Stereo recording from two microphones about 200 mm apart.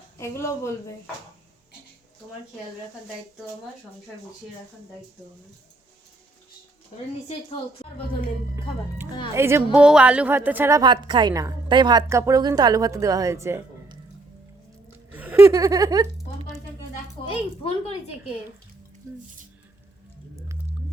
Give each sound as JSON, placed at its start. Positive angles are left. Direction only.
{"t": 0.2, "sound": "speech", "side_deg": 15}
{"t": 9.3, "sound": "a woman's voice", "side_deg": -15}
{"t": 15.1, "sound": "laughter", "side_deg": -10}
{"t": 17.2, "sound": "a sound", "side_deg": 25}